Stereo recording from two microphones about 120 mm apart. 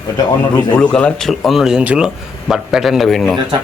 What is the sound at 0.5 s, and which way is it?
Speech, 10° left (ahead or behind).